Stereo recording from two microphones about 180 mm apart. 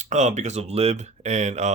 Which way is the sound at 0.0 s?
40° right (ahead or behind).